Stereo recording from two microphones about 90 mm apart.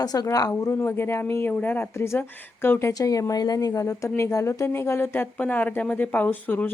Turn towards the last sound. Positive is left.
turn(degrees=20)  # may be behind; listen again after turning